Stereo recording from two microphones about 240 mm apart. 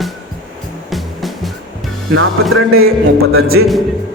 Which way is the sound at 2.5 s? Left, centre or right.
Right.